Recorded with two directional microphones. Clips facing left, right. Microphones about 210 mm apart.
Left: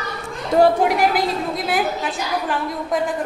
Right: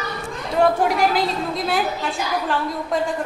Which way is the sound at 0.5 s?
45° left (ahead or behind).